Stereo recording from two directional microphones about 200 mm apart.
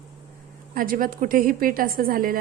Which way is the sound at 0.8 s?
45° right (ahead or behind).